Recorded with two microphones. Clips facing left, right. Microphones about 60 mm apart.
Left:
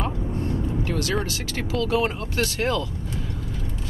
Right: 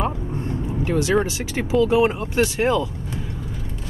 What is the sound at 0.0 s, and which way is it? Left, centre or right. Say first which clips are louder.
Speech: right 2 dB; right.